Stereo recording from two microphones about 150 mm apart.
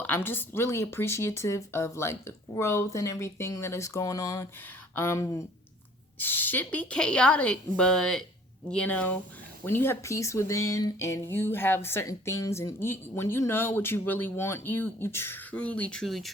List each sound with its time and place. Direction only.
0.0 s speech: 15° left (ahead or behind)